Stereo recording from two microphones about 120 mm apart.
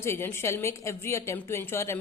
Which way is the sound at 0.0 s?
20° left (ahead or behind).